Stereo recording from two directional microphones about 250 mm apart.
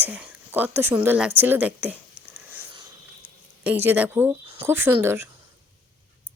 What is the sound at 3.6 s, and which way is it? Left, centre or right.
Speech, centre.